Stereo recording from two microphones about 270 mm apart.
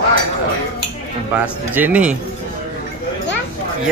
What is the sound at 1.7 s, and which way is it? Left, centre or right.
Speech, centre.